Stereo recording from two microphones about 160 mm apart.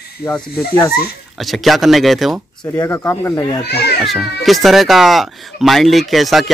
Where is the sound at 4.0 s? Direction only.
Centre (ahead or behind).